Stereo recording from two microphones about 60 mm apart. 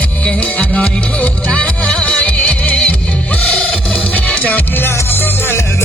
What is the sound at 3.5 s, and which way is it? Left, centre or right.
Music, centre.